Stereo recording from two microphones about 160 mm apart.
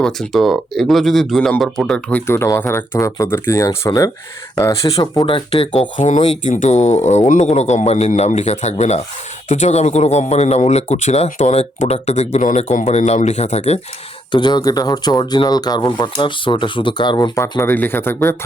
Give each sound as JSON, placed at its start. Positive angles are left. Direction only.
{"t": 0.0, "sound": "speech", "side_deg": 0}
{"t": 5.3, "sound": "speech", "side_deg": 35}
{"t": 6.0, "sound": "speech", "side_deg": 50}
{"t": 14.3, "sound": "speech", "side_deg": 25}